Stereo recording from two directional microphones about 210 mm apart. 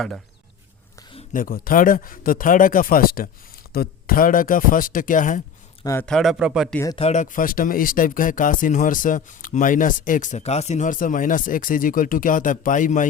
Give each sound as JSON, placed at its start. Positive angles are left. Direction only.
{"t": 1.3, "sound": "speech", "side_deg": 40}
{"t": 5.8, "sound": "speech", "side_deg": 15}
{"t": 6.1, "sound": "speech", "side_deg": 0}
{"t": 6.9, "sound": "speech", "side_deg": 30}